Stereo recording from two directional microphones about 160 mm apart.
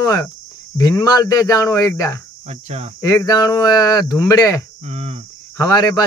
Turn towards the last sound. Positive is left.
turn(degrees=25)  # may be behind; listen again after turning